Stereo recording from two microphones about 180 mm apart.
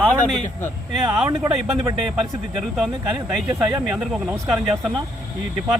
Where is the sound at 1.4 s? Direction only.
15° right (ahead or behind).